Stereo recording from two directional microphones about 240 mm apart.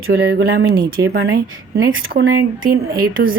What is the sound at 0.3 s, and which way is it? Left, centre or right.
Speech, right.